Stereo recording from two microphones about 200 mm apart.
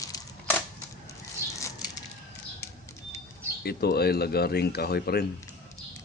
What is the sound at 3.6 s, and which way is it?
Speech, 50° left (ahead or behind).